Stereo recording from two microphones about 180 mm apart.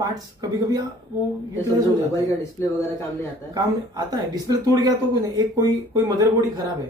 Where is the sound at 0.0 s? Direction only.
20° right (ahead or behind).